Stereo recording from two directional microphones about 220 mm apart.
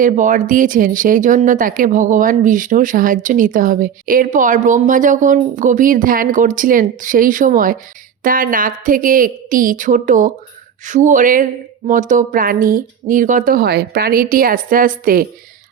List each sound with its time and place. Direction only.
0.0 s speech: 35° right (ahead or behind)